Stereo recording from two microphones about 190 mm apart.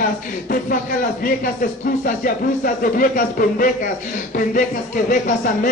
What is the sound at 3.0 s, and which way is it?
Speech, 45° left (ahead or behind).